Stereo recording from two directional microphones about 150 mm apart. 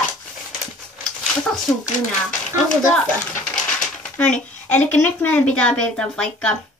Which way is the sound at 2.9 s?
5° left (ahead or behind).